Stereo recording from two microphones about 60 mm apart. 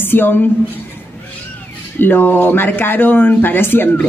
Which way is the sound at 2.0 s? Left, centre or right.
Left.